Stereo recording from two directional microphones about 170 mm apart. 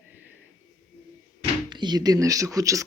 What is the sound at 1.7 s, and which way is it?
Speech, 25° right (ahead or behind).